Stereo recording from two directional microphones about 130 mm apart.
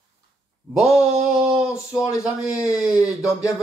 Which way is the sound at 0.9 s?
5° right (ahead or behind).